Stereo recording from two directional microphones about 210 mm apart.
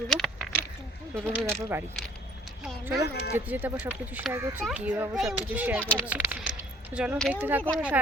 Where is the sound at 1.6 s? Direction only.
10° right (ahead or behind).